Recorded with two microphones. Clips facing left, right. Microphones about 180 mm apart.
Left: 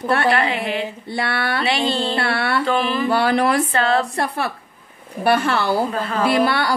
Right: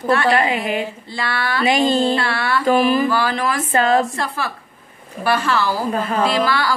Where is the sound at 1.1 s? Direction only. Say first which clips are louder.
Even; 60° left (ahead or behind).